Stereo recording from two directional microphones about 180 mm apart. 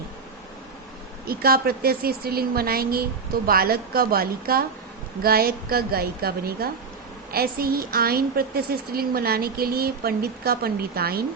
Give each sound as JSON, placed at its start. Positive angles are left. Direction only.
{"t": 1.3, "sound": "a woman's voice", "side_deg": -55}